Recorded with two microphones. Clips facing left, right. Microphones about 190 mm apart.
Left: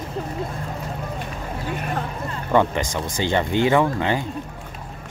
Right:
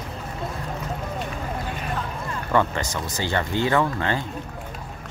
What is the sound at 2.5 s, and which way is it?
Speech, 15° left (ahead or behind).